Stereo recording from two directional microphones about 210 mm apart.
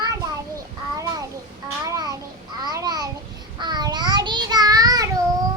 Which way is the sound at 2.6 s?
20° right (ahead or behind).